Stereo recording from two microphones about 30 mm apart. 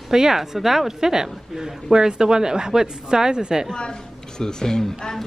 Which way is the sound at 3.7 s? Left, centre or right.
Left.